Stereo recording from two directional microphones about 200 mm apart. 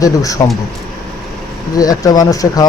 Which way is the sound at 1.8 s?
20° left (ahead or behind).